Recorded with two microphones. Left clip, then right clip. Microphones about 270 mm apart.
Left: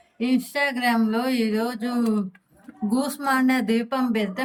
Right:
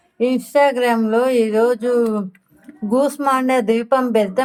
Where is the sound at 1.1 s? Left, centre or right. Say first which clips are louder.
Right 9 dB; centre.